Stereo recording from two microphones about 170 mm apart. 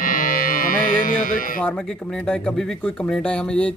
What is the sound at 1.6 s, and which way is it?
Speech, 5° left (ahead or behind).